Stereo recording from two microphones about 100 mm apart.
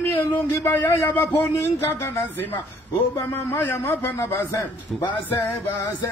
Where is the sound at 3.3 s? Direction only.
20° left (ahead or behind).